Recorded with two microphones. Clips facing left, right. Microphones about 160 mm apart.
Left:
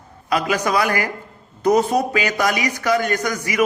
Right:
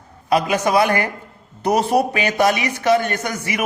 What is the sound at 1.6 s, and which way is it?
Speech, 65° right (ahead or behind).